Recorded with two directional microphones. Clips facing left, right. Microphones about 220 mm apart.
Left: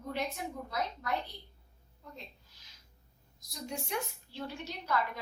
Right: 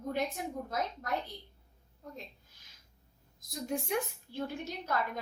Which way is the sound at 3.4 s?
50° right (ahead or behind).